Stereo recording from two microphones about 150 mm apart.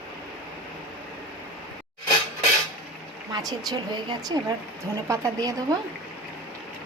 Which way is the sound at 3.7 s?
25° right (ahead or behind).